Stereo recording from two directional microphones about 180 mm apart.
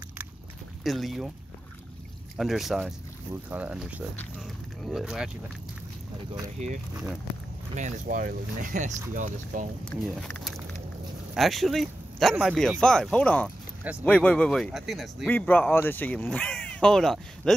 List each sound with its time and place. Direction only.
0.8 s speech: centre (ahead or behind)
2.3 s speech: centre (ahead or behind)
6.6 s speech: 40° right (ahead or behind)
9.8 s speech: 5° left (ahead or behind)
15.2 s speech: 10° left (ahead or behind)